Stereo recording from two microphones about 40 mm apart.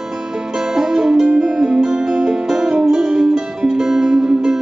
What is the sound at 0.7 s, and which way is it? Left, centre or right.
Music, centre.